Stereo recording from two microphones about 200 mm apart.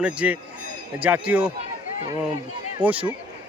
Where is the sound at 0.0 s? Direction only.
5° right (ahead or behind).